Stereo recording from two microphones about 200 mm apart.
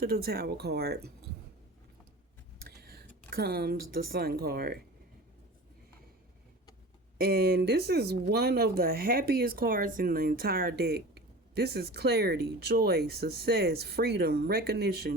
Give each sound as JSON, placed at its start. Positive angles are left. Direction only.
{"t": 0.0, "sound": "speech", "side_deg": -50}
{"t": 2.6, "sound": "speech", "side_deg": -50}
{"t": 7.2, "sound": "speech", "side_deg": -50}